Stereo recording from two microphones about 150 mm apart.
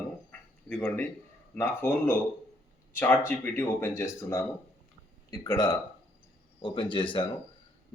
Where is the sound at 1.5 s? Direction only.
15° left (ahead or behind).